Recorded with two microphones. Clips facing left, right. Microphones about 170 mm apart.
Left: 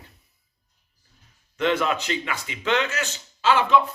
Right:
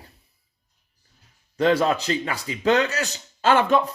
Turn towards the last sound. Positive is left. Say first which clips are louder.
# right 1 dB
turn(degrees=-50)  # may be behind; listen again after turning